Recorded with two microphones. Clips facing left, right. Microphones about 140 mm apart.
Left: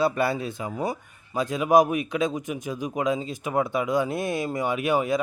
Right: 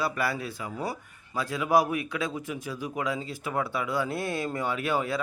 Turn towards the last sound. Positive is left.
turn(degrees=15)  # may be behind; listen again after turning